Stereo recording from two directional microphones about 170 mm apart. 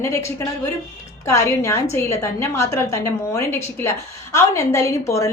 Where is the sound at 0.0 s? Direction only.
15° left (ahead or behind).